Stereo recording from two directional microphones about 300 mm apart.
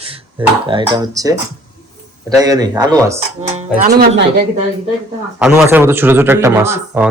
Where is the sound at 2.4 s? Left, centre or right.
Centre.